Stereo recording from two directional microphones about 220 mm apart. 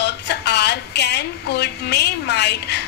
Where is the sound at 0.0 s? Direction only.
50° left (ahead or behind).